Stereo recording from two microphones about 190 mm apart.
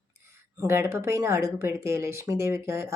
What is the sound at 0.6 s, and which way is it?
A woman's voice, 15° right (ahead or behind).